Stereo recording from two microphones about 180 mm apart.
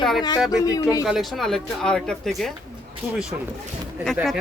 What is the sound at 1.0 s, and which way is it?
Speech, centre (ahead or behind).